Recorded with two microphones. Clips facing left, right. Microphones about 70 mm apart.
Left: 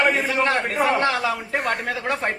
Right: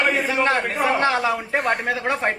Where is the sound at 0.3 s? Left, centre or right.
Centre.